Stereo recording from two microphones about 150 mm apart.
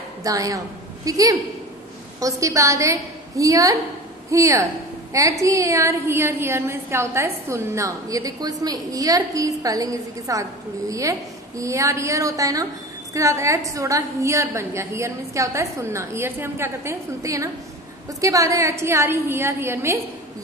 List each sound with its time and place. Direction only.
0.2 s a woman's voice: 20° right (ahead or behind)